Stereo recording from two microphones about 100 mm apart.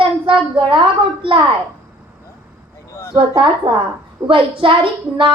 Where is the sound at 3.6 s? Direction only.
55° right (ahead or behind).